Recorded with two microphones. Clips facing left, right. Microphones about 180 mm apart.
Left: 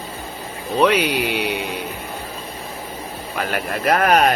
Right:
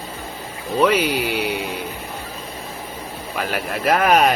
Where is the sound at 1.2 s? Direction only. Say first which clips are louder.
Even; 65° left (ahead or behind).